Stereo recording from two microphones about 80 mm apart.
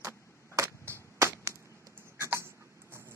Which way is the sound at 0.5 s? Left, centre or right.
Right.